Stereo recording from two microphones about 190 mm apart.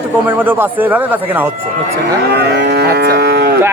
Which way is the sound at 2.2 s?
60° right (ahead or behind).